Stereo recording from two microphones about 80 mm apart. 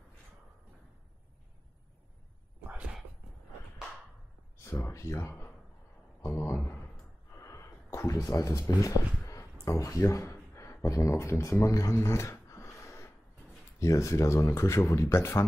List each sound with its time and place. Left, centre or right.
4.6 s speech: left
7.3 s a sound: left
13.7 s speech: left